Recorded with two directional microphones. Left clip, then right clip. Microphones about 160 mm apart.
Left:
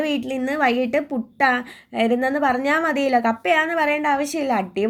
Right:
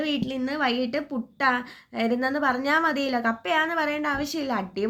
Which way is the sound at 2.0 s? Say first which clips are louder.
Left 4 dB; 5° left (ahead or behind).